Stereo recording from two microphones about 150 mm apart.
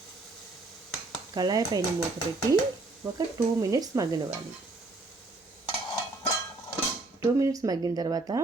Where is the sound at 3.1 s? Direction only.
25° right (ahead or behind).